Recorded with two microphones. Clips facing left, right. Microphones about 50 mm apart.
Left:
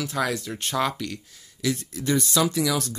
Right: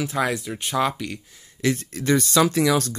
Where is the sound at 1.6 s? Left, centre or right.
Right.